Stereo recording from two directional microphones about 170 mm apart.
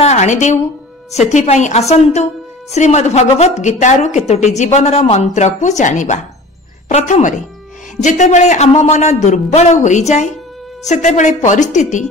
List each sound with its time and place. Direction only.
0.0 s a woman's voice: 40° left (ahead or behind)